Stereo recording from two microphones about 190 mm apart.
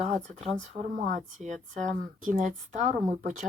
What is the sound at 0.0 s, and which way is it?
Speech, 40° right (ahead or behind).